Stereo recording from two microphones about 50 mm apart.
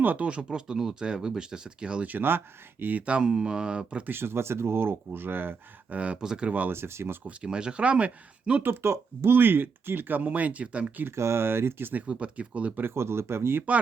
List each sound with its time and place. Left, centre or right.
0.0 s speech: right
0.3 s speech: right
2.0 s speech: right
3.1 s speech: right
4.0 s speech: right
5.9 s speech: right
6.7 s speech: right
7.3 s speech: centre
8.6 s speech: right
10.2 s speech: right
11.1 s speech: right
12.0 s speech: right
12.8 s speech: right